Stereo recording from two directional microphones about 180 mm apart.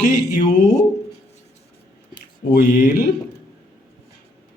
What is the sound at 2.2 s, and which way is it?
Speech, 65° left (ahead or behind).